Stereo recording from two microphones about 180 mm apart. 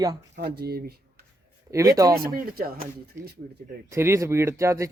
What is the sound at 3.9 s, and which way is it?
A man's voice, 15° right (ahead or behind).